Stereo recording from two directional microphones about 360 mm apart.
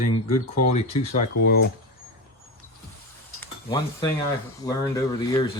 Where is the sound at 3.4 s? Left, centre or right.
Centre.